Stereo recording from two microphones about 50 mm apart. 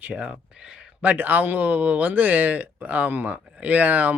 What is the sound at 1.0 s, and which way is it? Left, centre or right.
Speech, right.